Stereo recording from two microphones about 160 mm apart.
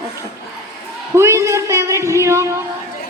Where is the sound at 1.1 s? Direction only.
20° right (ahead or behind).